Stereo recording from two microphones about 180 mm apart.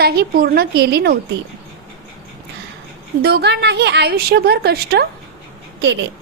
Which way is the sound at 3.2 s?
65° right (ahead or behind).